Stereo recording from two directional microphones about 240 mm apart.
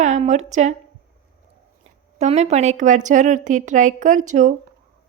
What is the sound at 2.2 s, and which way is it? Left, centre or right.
A woman's voice, right.